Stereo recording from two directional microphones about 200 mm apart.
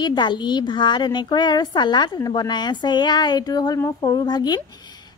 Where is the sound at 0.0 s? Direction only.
20° left (ahead or behind).